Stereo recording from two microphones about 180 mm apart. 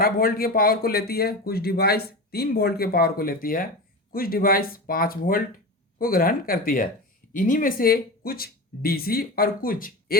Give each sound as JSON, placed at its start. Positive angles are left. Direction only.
{"t": 0.0, "sound": "speech", "side_deg": 55}